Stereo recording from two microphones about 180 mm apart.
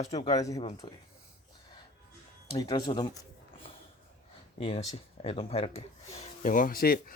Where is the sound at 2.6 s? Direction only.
20° left (ahead or behind); by 7.0 s 55° left (ahead or behind).